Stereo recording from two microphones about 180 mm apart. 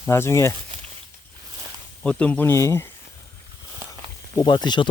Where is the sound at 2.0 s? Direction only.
5° left (ahead or behind).